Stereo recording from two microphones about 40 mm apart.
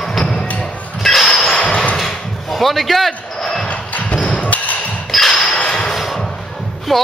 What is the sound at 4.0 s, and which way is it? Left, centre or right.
Thump, left.